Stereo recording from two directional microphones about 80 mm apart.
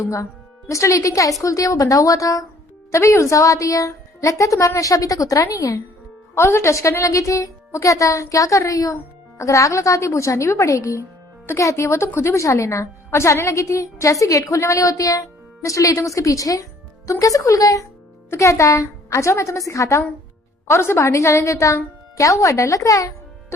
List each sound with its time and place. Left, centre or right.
0.0 s a woman's voice: left